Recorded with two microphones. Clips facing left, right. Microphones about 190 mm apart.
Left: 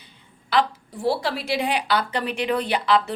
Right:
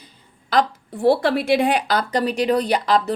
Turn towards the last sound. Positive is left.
turn(degrees=-40)  # may be behind; listen again after turning